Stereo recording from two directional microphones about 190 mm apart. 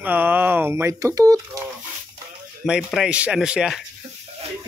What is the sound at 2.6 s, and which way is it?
Speech, centre (ahead or behind).